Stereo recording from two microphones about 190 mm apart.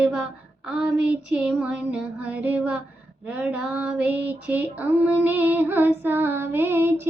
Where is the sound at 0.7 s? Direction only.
5° right (ahead or behind).